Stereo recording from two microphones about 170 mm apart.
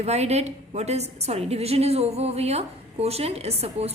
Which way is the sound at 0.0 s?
40° right (ahead or behind).